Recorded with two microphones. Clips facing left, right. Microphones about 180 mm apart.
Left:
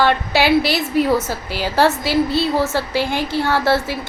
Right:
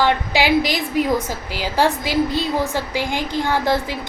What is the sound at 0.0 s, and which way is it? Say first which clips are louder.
A woman's voice: left 2 dB; 15° right (ahead or behind).